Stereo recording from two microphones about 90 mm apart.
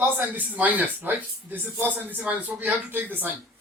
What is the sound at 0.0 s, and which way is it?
A man's voice, 20° right (ahead or behind).